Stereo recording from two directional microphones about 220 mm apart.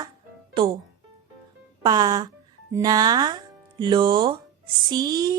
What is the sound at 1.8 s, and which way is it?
Speech, 20° right (ahead or behind).